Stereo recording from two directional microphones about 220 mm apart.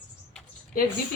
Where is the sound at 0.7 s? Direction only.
40° left (ahead or behind).